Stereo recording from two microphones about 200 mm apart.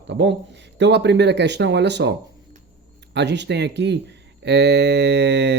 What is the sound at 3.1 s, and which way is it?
Speech, 60° right (ahead or behind).